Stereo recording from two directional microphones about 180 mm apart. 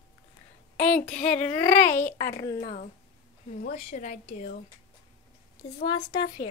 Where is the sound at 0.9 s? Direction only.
5° left (ahead or behind).